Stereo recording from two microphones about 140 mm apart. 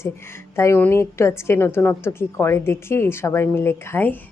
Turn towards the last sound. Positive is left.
turn(degrees=15)  # may be behind; listen again after turning